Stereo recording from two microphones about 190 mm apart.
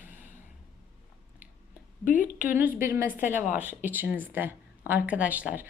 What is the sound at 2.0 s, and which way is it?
Speech, 45° left (ahead or behind).